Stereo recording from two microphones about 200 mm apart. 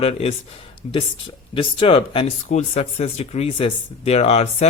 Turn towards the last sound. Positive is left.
turn(degrees=30)  # may be behind; listen again after turning